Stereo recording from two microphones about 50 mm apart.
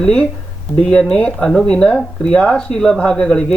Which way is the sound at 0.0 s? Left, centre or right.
Left.